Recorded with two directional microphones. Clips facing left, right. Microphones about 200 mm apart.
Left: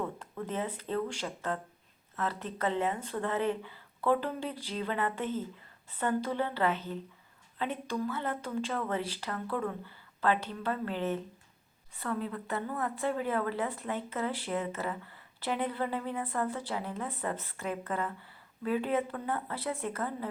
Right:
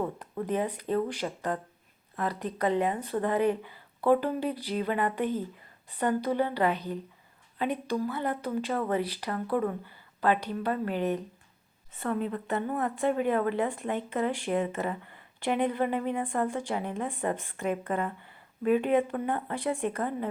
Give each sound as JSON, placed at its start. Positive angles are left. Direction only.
{"t": 0.0, "sound": "a woman's voice", "side_deg": -15}